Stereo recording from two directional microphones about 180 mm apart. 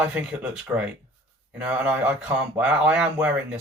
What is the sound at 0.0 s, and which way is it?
Speech, 5° right (ahead or behind).